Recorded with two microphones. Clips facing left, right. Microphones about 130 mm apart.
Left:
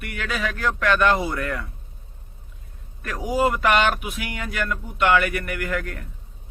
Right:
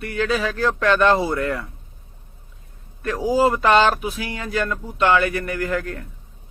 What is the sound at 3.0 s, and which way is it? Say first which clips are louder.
Speech: right 4 dB; 25° right (ahead or behind).